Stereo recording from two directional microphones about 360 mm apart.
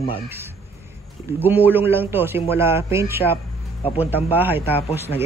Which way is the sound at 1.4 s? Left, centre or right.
Centre.